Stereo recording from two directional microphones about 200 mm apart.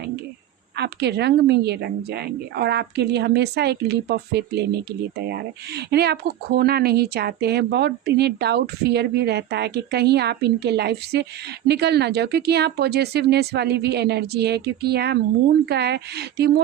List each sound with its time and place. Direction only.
0.8 s speech: 55° right (ahead or behind)